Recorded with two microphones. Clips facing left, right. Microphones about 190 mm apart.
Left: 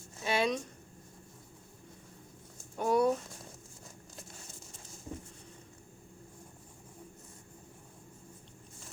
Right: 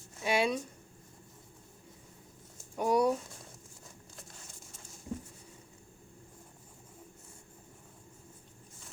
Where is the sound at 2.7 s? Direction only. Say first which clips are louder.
Even; 10° right (ahead or behind).